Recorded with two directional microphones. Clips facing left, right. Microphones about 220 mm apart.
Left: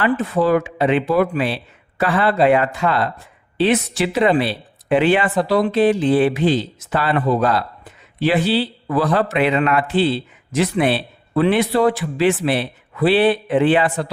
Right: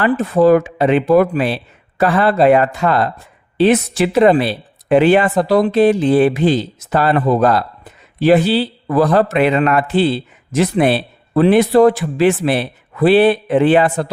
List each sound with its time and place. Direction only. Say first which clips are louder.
0.0 s speech: right 5 dB; 45° right (ahead or behind)